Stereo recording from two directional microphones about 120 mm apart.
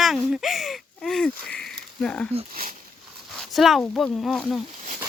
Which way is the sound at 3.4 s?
Centre (ahead or behind).